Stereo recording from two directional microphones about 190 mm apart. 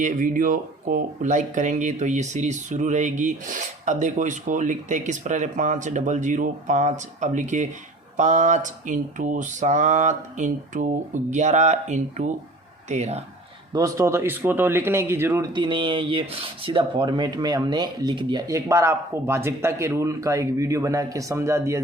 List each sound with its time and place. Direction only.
0.0 s speech: 45° right (ahead or behind)
13.7 s speech: 15° right (ahead or behind)